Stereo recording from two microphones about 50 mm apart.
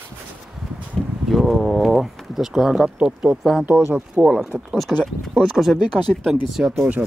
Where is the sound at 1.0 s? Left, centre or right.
Centre.